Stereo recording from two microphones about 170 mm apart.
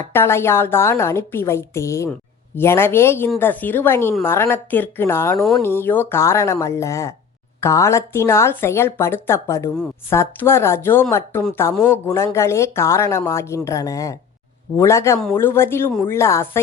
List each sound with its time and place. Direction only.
0.1 s speech: 15° left (ahead or behind)
5.4 s speech: centre (ahead or behind)
5.6 s speech: 15° left (ahead or behind)